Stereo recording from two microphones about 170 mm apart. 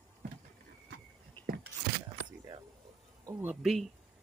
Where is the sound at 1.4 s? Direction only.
60° right (ahead or behind).